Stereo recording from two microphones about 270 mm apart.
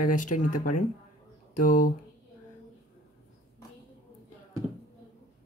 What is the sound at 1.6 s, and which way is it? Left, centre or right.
Speech, left.